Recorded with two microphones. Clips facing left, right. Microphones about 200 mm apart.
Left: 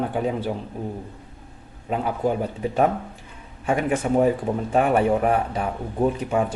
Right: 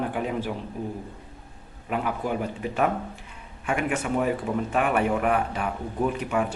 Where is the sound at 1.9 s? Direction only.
30° left (ahead or behind).